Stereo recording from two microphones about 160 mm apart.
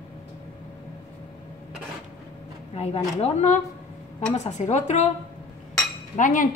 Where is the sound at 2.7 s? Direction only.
40° left (ahead or behind).